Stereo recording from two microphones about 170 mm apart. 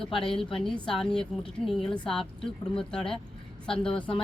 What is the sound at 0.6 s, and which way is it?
Speech, 5° left (ahead or behind).